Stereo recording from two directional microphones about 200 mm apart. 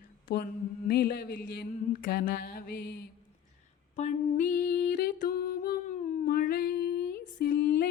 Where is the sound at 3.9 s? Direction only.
40° left (ahead or behind).